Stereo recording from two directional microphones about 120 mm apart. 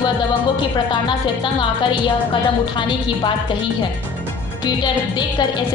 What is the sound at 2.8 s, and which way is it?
Speech, 40° left (ahead or behind).